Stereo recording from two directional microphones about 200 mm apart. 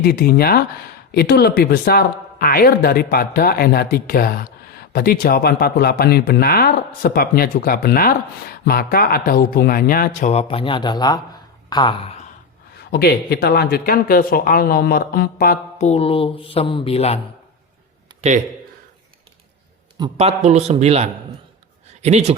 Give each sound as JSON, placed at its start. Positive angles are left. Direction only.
{"t": 0.0, "sound": "speech", "side_deg": 50}
{"t": 12.7, "sound": "speech", "side_deg": 50}
{"t": 20.1, "sound": "a man's voice", "side_deg": -35}